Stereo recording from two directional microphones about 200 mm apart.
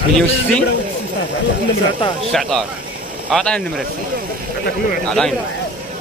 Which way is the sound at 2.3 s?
Centre (ahead or behind).